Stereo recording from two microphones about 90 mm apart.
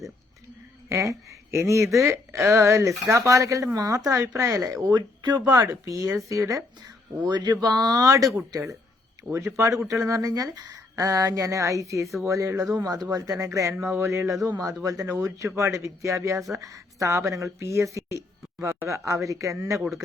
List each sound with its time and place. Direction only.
0.9 s speech: 35° right (ahead or behind)
4.9 s speech: 50° right (ahead or behind)
5.5 s speech: 40° right (ahead or behind)
7.3 s speech: 50° right (ahead or behind)
9.3 s speech: 30° right (ahead or behind)
12.0 s speech: centre (ahead or behind)
12.3 s speech: 35° right (ahead or behind)